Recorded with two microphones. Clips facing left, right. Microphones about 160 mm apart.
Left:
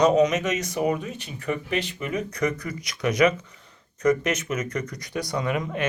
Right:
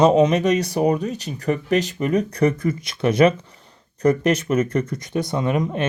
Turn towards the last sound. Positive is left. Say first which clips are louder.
# right 5 dB
turn(degrees=-25)  # may be behind; listen again after turning